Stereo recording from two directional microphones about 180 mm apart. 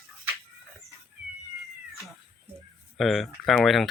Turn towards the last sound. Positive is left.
turn(degrees=0)  # may be behind; listen again after turning